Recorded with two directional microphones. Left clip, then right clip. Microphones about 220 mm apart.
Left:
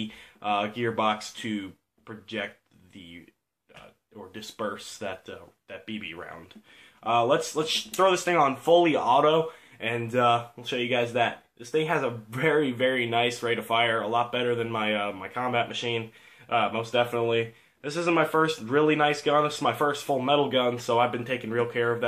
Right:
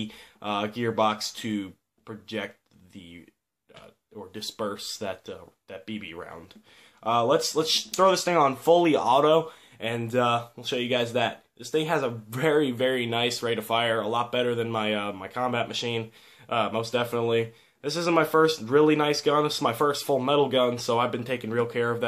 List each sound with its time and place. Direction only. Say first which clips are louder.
0.1 s speech: left 5 dB; 55° right (ahead or behind)
4.3 s speech: right 1 dB; 55° right (ahead or behind)